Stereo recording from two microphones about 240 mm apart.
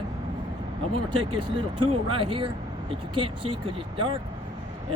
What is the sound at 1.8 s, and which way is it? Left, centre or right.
Speech, right.